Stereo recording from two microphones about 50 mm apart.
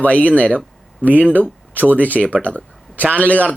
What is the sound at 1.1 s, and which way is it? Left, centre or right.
Speech, right.